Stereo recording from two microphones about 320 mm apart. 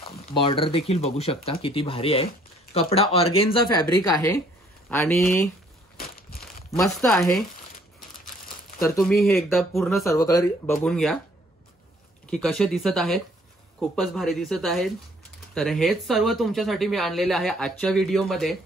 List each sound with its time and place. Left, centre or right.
0.0 s speech: centre
5.9 s crushing: left
6.7 s speech: centre
8.8 s speech: centre
10.1 s speech: centre
12.3 s speech: centre